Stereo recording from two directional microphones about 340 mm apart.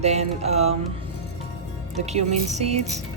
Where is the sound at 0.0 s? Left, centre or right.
Centre.